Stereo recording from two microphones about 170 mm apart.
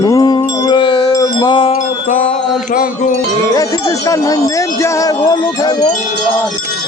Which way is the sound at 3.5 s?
20° left (ahead or behind).